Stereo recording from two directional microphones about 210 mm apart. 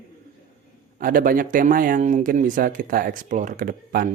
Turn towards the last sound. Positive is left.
turn(degrees=-45)  # may be behind; listen again after turning